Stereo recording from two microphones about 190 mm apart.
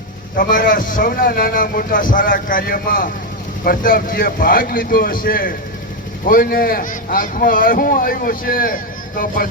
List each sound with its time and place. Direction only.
0.3 s speech: 45° left (ahead or behind)